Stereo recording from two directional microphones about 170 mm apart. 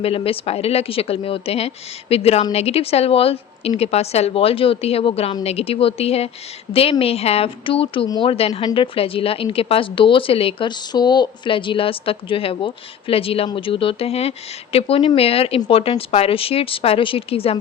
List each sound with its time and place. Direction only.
0.0 s a woman's voice: 35° left (ahead or behind)